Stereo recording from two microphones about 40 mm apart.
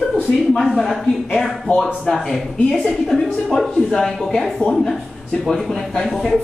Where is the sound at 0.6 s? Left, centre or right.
Centre.